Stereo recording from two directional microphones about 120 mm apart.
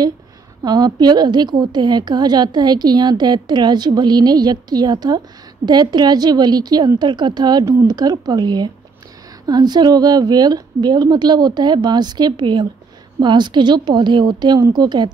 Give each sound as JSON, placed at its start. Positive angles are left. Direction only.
{"t": 0.7, "sound": "a woman's voice", "side_deg": -35}